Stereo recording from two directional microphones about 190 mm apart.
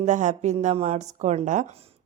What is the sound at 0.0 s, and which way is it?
Speech, 40° right (ahead or behind).